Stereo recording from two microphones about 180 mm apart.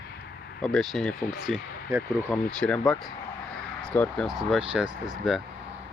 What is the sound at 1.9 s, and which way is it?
Speech, 15° right (ahead or behind).